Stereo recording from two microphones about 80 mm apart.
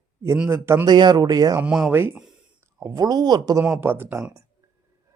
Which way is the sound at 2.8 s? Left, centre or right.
Right.